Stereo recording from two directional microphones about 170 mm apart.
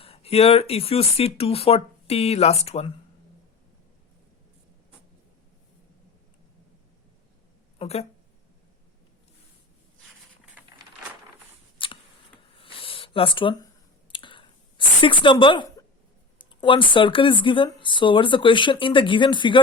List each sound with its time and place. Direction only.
0.0 s speech: 35° left (ahead or behind)
7.8 s speech: 35° left (ahead or behind)
11.8 s scissors: 30° left (ahead or behind)
12.5 s a sound: 30° left (ahead or behind)
14.1 s clicking: 30° left (ahead or behind)
16.4 s speech: 30° left (ahead or behind)